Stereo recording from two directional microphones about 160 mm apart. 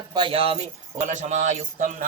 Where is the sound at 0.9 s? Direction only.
50° right (ahead or behind).